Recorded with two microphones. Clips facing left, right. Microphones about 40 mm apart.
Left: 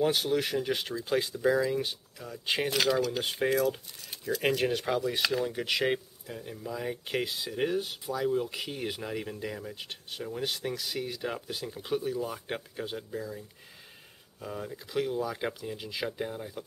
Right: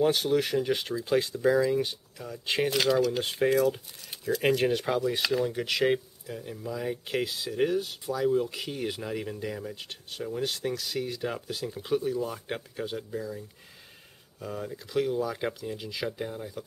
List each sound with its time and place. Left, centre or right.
0.0 s speech: centre
14.4 s speech: centre